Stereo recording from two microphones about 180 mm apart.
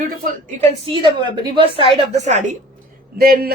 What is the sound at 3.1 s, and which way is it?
Speech, 55° right (ahead or behind).